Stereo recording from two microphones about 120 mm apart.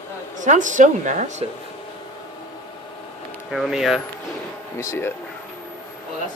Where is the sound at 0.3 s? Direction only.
90° right.